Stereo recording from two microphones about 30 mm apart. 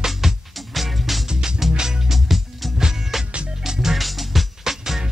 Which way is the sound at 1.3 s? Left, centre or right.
Right.